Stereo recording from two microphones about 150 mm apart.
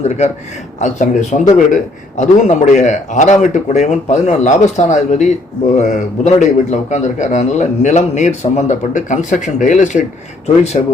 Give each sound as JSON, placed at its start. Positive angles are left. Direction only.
{"t": 0.8, "sound": "a man's voice", "side_deg": 50}